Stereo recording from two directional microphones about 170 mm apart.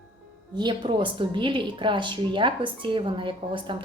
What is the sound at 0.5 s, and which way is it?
Speech, 25° right (ahead or behind).